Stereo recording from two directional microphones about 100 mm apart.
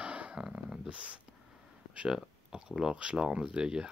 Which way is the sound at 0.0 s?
15° right (ahead or behind).